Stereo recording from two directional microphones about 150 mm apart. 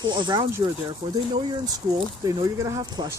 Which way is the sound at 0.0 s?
30° right (ahead or behind).